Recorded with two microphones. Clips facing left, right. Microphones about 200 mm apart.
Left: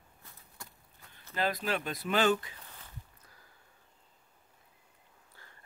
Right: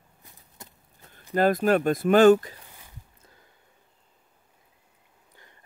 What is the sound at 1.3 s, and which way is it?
Speech, 50° right (ahead or behind).